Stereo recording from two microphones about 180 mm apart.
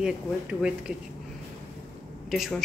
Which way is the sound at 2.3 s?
Centre (ahead or behind).